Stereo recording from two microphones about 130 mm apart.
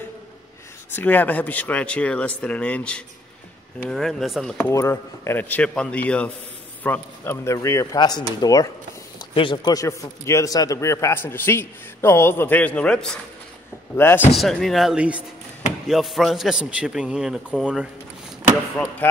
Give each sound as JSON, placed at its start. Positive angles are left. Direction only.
{"t": 0.9, "sound": "a man's voice", "side_deg": 15}
{"t": 4.6, "sound": "a man's voice", "side_deg": 20}
{"t": 13.9, "sound": "speech", "side_deg": 15}
{"t": 14.3, "sound": "a man's voice", "side_deg": 0}